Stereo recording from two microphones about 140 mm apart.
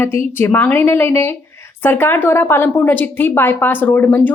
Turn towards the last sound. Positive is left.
turn(degrees=15)  # may be behind; listen again after turning